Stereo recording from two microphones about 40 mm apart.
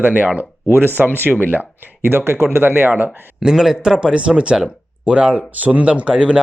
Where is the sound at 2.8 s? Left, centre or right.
Right.